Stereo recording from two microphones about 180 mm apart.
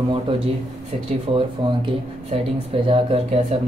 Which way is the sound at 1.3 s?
30° right (ahead or behind).